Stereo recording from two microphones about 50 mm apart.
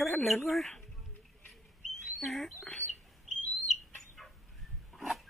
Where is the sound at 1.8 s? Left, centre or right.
Centre.